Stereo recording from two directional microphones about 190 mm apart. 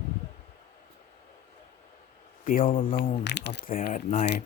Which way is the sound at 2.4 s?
50° left (ahead or behind).